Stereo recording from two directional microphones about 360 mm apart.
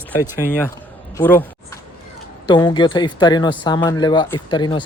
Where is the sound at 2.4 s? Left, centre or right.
Centre.